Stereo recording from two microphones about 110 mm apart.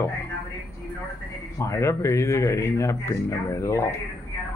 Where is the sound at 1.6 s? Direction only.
25° left (ahead or behind).